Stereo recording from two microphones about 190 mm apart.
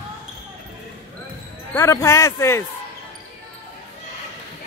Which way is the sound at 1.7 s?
15° left (ahead or behind).